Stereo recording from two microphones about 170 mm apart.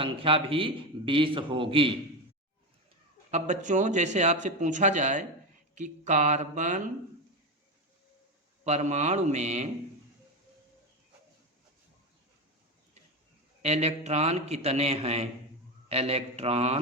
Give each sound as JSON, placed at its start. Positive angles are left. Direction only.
{"t": 0.0, "sound": "a man's voice", "side_deg": -30}
{"t": 3.3, "sound": "speech", "side_deg": -45}
{"t": 8.6, "sound": "a man's voice", "side_deg": -40}
{"t": 13.6, "sound": "a man's voice", "side_deg": -40}